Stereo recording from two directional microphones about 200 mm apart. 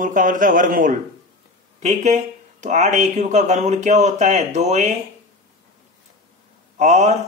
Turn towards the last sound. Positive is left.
turn(degrees=-35)  # may be behind; listen again after turning